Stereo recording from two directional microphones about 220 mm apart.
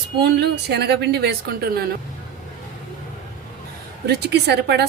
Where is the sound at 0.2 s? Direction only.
50° right (ahead or behind).